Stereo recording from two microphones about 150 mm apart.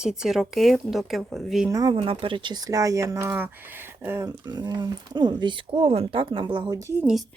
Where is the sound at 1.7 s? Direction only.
30° right (ahead or behind).